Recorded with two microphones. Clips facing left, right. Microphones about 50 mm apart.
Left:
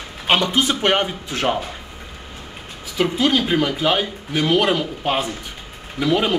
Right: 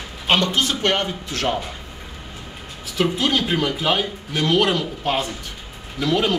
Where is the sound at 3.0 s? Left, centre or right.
Centre.